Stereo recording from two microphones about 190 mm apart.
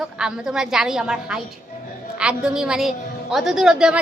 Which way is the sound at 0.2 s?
5° right (ahead or behind).